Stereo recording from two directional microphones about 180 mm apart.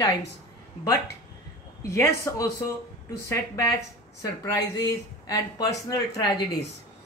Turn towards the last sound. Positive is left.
turn(degrees=20)  # may be behind; listen again after turning